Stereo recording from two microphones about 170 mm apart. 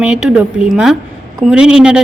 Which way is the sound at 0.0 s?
5° right (ahead or behind).